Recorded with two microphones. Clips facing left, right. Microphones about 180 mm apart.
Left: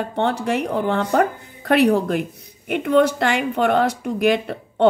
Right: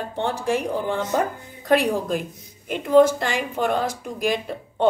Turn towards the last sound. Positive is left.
turn(degrees=70)  # may be behind; listen again after turning